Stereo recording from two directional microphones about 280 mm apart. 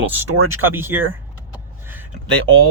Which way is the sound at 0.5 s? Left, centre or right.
Centre.